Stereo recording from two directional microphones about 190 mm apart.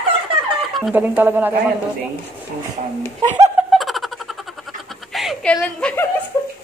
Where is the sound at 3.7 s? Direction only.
Centre (ahead or behind).